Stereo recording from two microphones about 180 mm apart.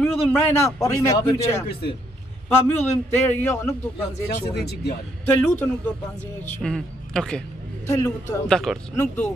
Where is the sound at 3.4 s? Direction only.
15° left (ahead or behind).